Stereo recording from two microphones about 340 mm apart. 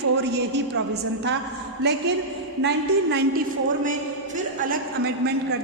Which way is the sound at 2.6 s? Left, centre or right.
Right.